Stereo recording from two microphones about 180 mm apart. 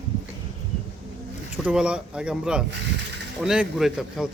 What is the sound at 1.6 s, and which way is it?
A man's voice, 5° right (ahead or behind).